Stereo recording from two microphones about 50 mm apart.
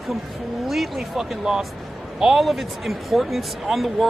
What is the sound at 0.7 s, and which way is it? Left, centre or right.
Speech, centre.